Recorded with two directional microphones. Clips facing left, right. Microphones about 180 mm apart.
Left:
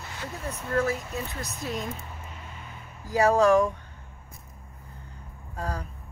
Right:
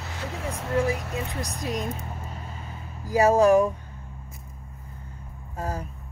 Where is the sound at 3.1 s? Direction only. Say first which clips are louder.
Right 2 dB; 20° right (ahead or behind).